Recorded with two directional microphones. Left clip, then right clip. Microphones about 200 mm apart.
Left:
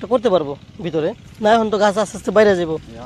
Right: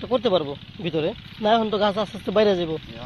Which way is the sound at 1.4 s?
30° left (ahead or behind).